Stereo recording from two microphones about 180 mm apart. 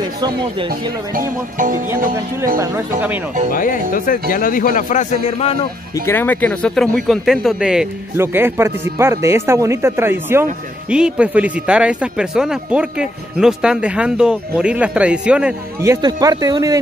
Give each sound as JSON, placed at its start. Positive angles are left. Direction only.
{"t": 0.2, "sound": "speech", "side_deg": -25}
{"t": 2.0, "sound": "speech", "side_deg": -50}
{"t": 3.9, "sound": "a man's voice", "side_deg": 50}
{"t": 6.0, "sound": "speech", "side_deg": 10}